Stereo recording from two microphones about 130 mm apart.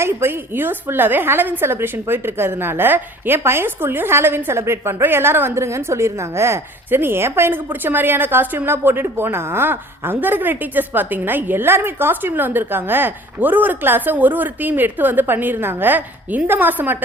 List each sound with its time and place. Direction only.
0.0 s a woman's voice: 20° right (ahead or behind)